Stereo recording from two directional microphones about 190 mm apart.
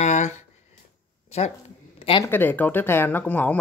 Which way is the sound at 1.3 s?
35° left (ahead or behind).